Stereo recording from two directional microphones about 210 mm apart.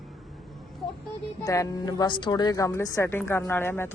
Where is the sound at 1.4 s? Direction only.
15° left (ahead or behind).